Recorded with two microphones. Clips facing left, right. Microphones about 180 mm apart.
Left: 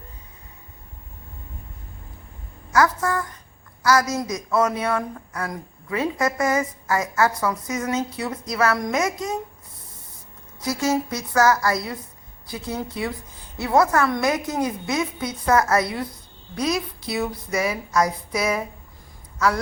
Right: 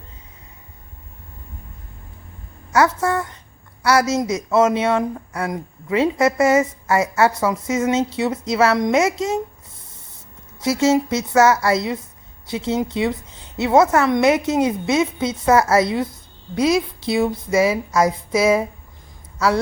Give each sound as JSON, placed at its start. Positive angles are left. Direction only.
{"t": 2.7, "sound": "a woman's voice", "side_deg": -25}
{"t": 10.6, "sound": "a woman's voice", "side_deg": -25}